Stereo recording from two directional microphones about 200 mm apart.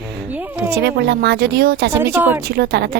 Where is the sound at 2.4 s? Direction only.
50° right (ahead or behind).